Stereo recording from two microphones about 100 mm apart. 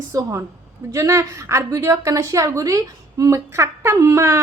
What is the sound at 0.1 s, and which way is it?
A woman's voice, 30° right (ahead or behind).